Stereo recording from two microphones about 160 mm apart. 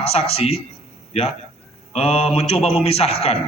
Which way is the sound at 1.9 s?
40° left (ahead or behind).